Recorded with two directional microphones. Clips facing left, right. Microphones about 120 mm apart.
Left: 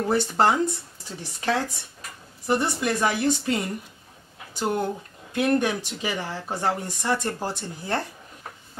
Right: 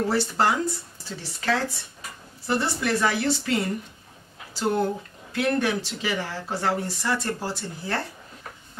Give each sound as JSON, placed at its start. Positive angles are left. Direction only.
{"t": 0.1, "sound": "speech", "side_deg": 20}
{"t": 5.3, "sound": "speech", "side_deg": 20}